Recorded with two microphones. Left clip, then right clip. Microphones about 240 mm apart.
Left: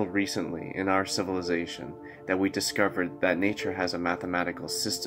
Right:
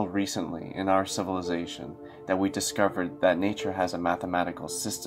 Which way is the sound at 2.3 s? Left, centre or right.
Centre.